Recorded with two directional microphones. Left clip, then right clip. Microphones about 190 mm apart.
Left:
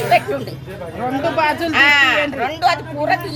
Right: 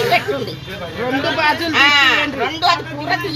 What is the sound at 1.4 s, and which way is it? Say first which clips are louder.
Speech: even; 65° left (ahead or behind).